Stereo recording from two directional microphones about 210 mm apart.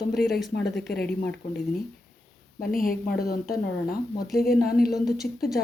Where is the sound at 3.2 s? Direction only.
45° left (ahead or behind).